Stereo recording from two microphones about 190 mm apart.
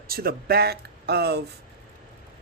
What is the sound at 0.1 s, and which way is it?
Speech, 55° right (ahead or behind).